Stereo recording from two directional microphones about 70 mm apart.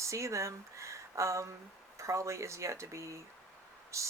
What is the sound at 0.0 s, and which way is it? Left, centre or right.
Speech, right.